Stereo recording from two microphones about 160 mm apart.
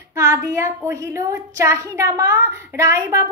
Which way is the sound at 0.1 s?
20° right (ahead or behind).